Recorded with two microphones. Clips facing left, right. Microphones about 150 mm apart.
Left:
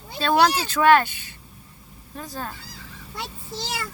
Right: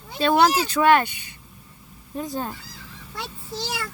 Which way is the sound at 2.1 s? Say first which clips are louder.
Right 5 dB; 20° right (ahead or behind).